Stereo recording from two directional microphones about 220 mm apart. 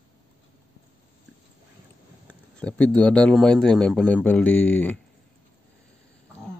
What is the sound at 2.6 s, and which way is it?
A man's voice, 5° left (ahead or behind).